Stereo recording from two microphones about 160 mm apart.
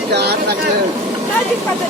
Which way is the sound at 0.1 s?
90° right.